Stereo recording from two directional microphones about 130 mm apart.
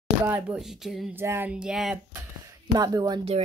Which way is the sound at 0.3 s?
5° right (ahead or behind).